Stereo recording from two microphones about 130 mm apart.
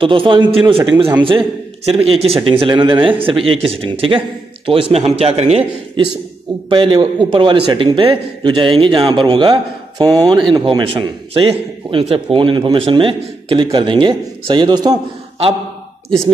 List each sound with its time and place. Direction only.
0.0 s a man's voice: 40° right (ahead or behind)
6.7 s a man's voice: 40° right (ahead or behind)